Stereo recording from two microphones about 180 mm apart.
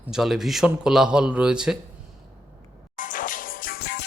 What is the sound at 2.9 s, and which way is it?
Music, 45° left (ahead or behind).